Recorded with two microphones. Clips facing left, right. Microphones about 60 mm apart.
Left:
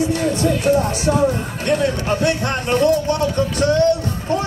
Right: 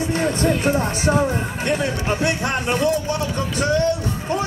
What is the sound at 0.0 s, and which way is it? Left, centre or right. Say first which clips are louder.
Speech: left 2 dB; right.